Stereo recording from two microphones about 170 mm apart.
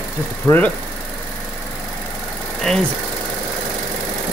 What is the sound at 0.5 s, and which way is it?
Speech, 20° left (ahead or behind).